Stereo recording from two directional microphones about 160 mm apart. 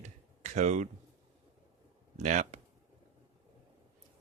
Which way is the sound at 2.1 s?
50° right (ahead or behind).